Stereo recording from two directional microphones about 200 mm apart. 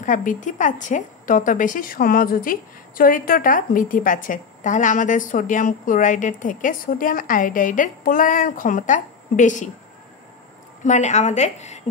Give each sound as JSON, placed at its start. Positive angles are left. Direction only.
{"t": 0.0, "sound": "a woman's voice", "side_deg": 40}
{"t": 10.8, "sound": "a woman's voice", "side_deg": 35}